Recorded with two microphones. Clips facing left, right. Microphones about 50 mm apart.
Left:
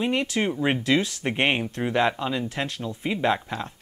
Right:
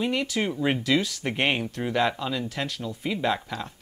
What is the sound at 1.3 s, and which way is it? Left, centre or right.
Speech, left.